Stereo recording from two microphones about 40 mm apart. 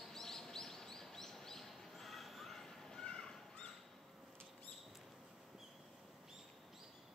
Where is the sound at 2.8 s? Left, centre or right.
Centre.